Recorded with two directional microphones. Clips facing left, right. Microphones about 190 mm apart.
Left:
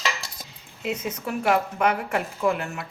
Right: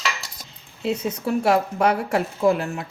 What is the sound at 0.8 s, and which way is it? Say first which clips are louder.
A woman's voice: right 5 dB; 35° right (ahead or behind).